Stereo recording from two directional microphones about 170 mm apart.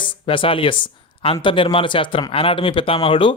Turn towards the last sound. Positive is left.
turn(degrees=30)  # may be behind; listen again after turning